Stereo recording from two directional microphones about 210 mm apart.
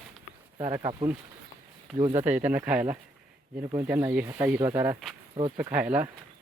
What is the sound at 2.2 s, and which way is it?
Speech, 10° right (ahead or behind).